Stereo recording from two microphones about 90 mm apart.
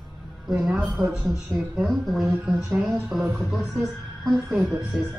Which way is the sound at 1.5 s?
20° right (ahead or behind).